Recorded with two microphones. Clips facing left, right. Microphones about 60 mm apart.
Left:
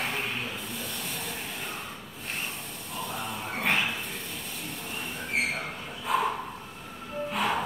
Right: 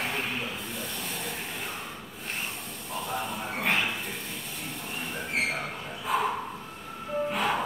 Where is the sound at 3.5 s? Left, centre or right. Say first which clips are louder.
Even; centre.